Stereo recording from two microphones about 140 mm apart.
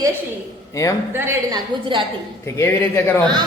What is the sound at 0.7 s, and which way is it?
Speech, 25° left (ahead or behind).